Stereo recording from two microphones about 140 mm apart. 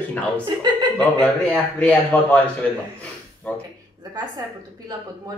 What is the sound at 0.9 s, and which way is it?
Speech, 10° left (ahead or behind).